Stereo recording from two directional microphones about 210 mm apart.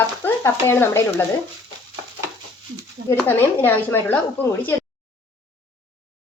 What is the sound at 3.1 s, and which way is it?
A woman's voice, 10° left (ahead or behind).